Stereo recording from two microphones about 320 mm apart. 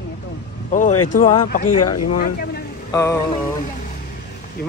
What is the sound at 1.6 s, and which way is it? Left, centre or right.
Speech, left.